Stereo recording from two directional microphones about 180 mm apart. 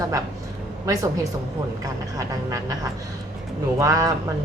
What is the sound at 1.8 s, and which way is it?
Speech, 20° right (ahead or behind).